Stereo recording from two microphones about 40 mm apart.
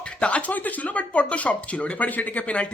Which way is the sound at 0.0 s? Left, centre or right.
Left.